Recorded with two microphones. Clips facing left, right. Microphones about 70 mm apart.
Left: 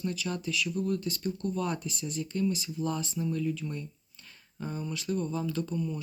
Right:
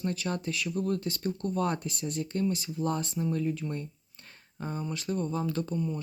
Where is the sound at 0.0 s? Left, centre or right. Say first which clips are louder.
Right 1 dB; right.